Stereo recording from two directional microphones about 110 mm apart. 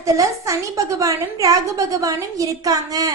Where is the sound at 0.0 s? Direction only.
30° right (ahead or behind).